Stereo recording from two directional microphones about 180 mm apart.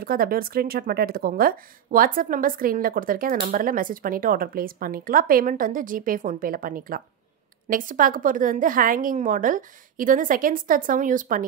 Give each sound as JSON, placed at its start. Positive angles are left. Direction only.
{"t": 0.0, "sound": "speech", "side_deg": -55}